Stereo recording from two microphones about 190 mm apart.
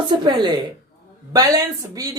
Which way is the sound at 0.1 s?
25° right (ahead or behind).